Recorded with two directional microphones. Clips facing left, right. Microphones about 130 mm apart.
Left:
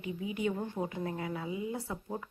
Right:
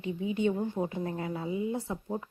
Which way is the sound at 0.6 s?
20° right (ahead or behind).